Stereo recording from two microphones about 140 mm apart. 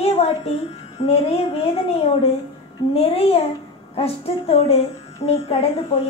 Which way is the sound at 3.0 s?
45° left (ahead or behind).